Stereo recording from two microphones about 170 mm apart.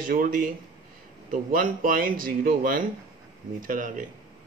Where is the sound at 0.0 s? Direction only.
55° right (ahead or behind).